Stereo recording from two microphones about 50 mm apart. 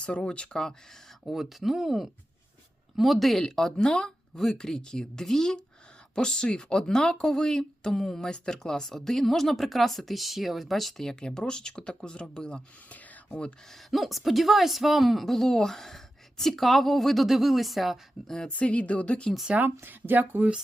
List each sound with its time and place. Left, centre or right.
0.0 s speech: centre
1.2 s speech: centre
12.9 s a sound: left
13.9 s speech: centre
18.4 s speech: left
19.5 s speech: right